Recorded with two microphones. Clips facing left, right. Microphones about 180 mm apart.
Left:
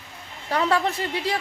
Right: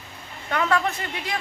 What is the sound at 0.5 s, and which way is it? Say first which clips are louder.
Speech: left 1 dB; 30° left (ahead or behind).